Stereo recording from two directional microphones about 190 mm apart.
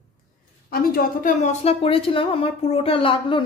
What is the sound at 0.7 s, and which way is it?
A woman's voice, 50° left (ahead or behind).